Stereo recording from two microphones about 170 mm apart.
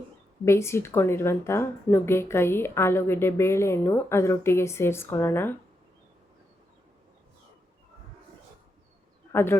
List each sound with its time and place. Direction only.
0.4 s a woman's voice: 15° left (ahead or behind)
9.3 s speech: 15° left (ahead or behind)